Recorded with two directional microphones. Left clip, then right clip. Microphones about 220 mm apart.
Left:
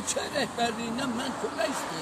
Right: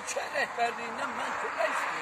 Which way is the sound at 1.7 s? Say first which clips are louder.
Right 2 dB; 35° left (ahead or behind).